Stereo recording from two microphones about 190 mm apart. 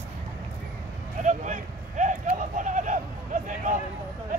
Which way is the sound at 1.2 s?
40° right (ahead or behind).